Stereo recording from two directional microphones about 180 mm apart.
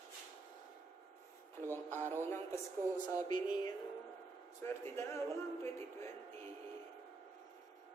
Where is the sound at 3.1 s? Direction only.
25° left (ahead or behind).